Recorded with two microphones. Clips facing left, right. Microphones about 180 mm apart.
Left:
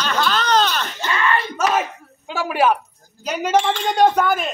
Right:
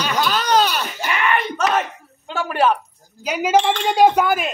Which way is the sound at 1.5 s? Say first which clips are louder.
Even; 5° left (ahead or behind).